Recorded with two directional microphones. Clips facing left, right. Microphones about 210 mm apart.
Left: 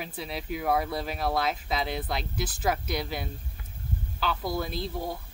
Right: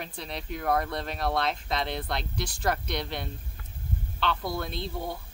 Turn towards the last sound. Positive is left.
turn(degrees=0)  # may be behind; listen again after turning